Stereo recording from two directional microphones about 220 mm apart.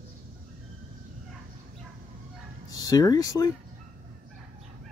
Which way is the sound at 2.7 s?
15° left (ahead or behind).